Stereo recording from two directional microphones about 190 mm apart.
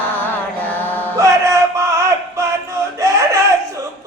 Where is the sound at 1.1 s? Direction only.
15° right (ahead or behind).